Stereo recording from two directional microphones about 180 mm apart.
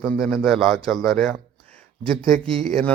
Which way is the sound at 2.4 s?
30° right (ahead or behind).